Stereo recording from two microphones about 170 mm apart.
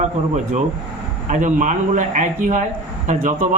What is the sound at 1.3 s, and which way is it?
A man's voice, 45° right (ahead or behind).